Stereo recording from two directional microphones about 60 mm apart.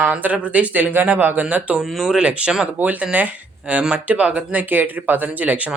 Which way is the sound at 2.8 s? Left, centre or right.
Right.